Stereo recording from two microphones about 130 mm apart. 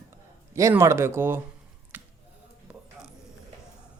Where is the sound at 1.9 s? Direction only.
15° right (ahead or behind).